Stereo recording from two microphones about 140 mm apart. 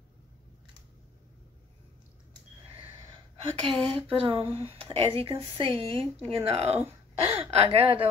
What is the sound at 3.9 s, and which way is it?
Speech, 40° right (ahead or behind).